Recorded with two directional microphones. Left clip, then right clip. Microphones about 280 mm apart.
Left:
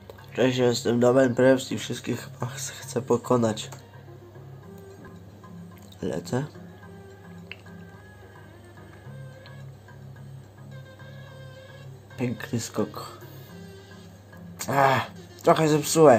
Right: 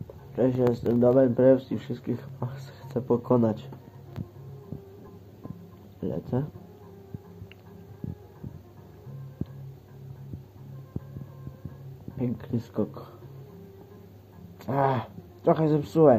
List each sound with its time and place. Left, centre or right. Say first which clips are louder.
0.4 s speech: left 2 dB; centre
5.9 s speech: left 2 dB; centre
12.2 s speech: left 2 dB; centre
14.6 s speech: left 5 dB; centre